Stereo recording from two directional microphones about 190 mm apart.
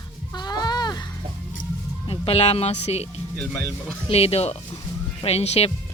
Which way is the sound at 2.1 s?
30° left (ahead or behind).